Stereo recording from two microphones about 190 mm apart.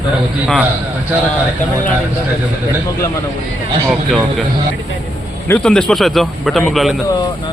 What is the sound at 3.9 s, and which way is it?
Speech, centre (ahead or behind).